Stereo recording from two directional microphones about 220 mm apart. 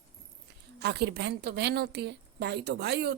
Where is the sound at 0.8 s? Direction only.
50° right (ahead or behind).